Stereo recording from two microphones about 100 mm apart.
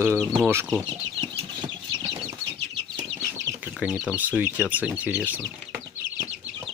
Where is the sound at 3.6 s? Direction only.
15° right (ahead or behind).